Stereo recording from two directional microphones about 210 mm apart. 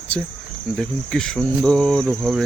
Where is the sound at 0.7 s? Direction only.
5° left (ahead or behind).